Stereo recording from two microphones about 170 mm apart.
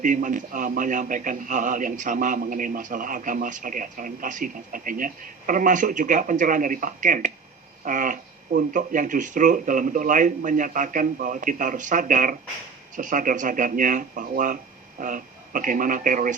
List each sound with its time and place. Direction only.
0.0 s a man's voice: 50° right (ahead or behind)